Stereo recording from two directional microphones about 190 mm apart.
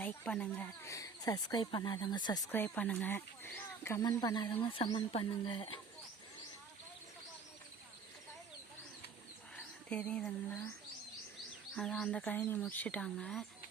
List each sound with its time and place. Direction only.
0.0 s speech: 5° left (ahead or behind)
2.5 s speech: 10° left (ahead or behind); by 5.8 s 25° left (ahead or behind)
9.6 s a sound: 5° left (ahead or behind)
11.8 s speech: centre (ahead or behind)